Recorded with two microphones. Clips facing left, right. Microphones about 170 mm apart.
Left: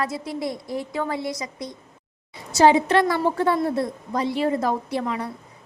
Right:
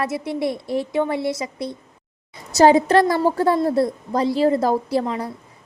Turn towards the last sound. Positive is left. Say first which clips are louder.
# right 4 dB
turn(degrees=-35)  # may be behind; listen again after turning